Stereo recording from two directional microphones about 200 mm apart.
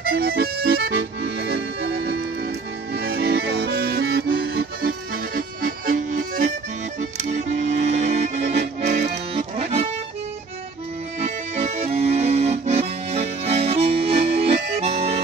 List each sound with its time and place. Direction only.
0.1 s accordion: 50° right (ahead or behind)
7.6 s accordion: 35° right (ahead or behind)
11.5 s accordion: 35° right (ahead or behind)